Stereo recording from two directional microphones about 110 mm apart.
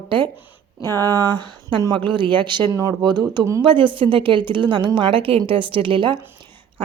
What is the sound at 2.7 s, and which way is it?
A woman's voice, 35° right (ahead or behind).